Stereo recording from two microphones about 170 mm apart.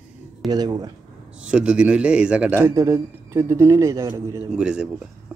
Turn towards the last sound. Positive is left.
turn(degrees=-5)  # may be behind; listen again after turning